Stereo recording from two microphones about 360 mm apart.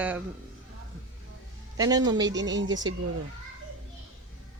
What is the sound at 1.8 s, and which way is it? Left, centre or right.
Speech, centre.